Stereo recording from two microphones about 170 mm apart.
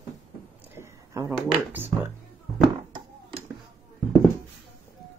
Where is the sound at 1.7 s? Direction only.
10° right (ahead or behind).